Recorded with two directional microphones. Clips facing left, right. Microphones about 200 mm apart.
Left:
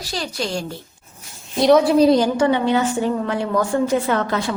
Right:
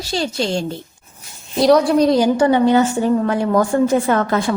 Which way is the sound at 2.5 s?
45° right (ahead or behind).